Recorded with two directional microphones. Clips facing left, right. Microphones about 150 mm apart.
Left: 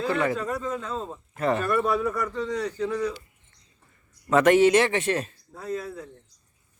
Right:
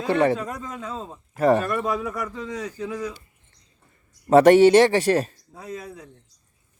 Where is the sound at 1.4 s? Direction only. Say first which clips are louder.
Right 6 dB; 40° right (ahead or behind).